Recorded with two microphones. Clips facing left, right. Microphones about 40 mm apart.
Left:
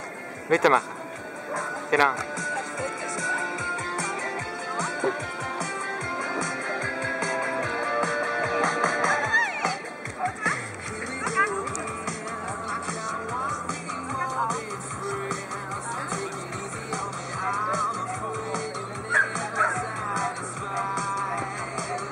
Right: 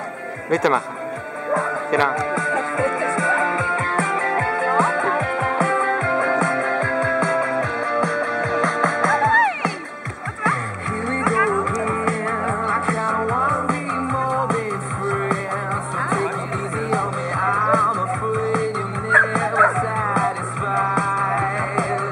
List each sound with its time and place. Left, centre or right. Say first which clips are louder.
0.5 s speech: right 2 dB; centre
1.9 s speech: right 1 dB; centre
2.3 s music: right 9 dB; right; by 9.3 s centre
9.3 s music: right 7 dB; centre
11.2 s music: right 6 dB; right
16.9 s music: right 9 dB; centre